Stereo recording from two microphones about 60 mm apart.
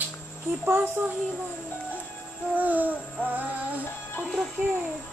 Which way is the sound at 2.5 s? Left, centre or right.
Right.